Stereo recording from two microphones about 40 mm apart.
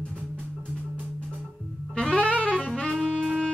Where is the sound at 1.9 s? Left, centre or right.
Left.